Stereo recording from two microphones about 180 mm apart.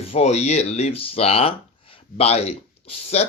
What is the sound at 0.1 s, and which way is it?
Speech, 35° left (ahead or behind).